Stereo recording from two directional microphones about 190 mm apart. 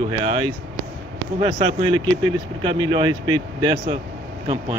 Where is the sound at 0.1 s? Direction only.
30° right (ahead or behind).